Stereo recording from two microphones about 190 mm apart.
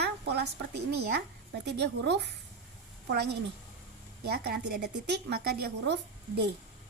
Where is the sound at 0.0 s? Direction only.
60° right (ahead or behind).